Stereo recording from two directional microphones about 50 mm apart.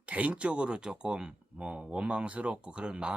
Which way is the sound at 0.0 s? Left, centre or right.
Right.